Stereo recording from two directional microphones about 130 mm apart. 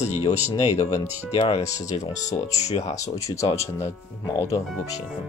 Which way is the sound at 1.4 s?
50° left (ahead or behind).